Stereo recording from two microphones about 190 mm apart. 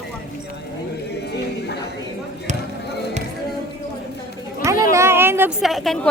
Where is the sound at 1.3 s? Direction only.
60° left (ahead or behind).